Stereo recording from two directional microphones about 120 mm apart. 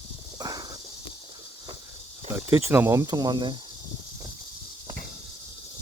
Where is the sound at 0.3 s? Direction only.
30° right (ahead or behind).